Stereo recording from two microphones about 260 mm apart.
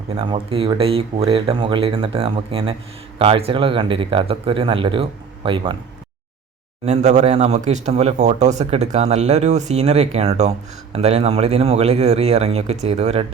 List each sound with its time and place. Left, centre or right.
0.1 s speech: right
6.8 s speech: right